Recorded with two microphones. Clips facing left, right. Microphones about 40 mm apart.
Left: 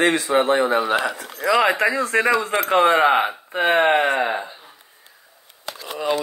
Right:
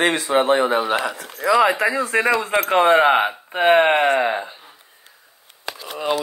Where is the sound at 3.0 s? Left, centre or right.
Right.